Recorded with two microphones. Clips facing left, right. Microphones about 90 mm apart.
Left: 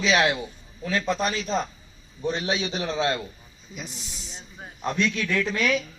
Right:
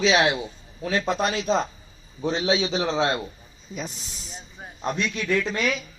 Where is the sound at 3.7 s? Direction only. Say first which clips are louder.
Right 4 dB; 40° right (ahead or behind).